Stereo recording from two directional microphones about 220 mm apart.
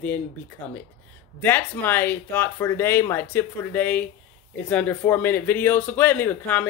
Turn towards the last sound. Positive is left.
turn(degrees=10)  # may be behind; listen again after turning